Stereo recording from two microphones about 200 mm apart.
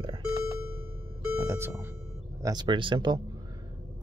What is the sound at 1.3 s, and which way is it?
Speech, 15° right (ahead or behind).